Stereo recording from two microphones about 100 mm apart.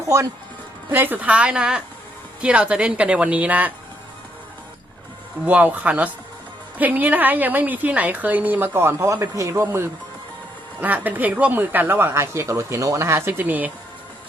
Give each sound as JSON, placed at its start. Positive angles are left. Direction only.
{"t": 0.9, "sound": "a woman's voice", "side_deg": -20}
{"t": 5.5, "sound": "a woman's voice", "side_deg": -15}
{"t": 10.8, "sound": "speech", "side_deg": -15}